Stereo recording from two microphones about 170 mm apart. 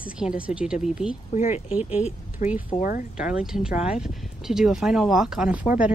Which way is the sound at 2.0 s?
50° left (ahead or behind).